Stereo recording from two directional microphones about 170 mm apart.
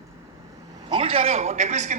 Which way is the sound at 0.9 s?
35° right (ahead or behind).